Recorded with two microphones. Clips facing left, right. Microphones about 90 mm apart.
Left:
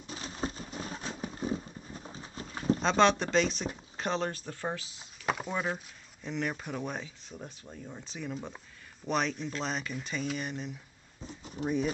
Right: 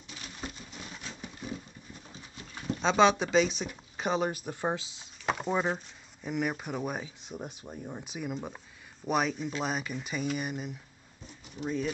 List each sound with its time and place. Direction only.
0.0 s a sound: 35° left (ahead or behind)
2.8 s speech: centre (ahead or behind); by 5.0 s 20° right (ahead or behind)
5.2 s speech: centre (ahead or behind)
11.6 s speech: 15° left (ahead or behind)